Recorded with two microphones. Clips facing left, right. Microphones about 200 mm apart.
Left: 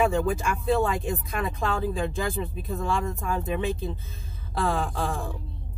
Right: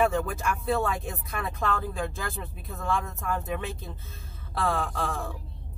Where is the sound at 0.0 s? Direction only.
15° left (ahead or behind).